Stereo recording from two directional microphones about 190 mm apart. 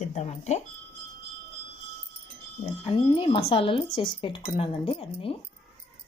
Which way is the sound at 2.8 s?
30° left (ahead or behind).